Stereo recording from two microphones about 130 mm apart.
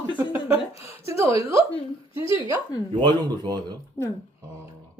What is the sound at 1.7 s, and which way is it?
A woman's voice, 45° left (ahead or behind).